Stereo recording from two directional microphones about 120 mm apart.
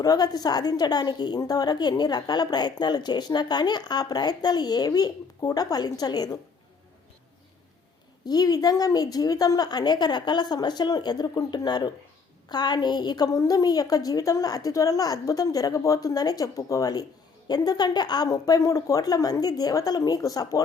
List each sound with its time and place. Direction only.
0.0 s a woman's voice: 35° left (ahead or behind)
8.3 s a woman's voice: 30° left (ahead or behind)